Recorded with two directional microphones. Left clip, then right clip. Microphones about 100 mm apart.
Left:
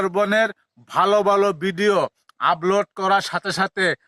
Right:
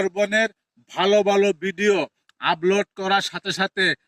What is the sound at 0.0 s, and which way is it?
A man's voice, 40° left (ahead or behind).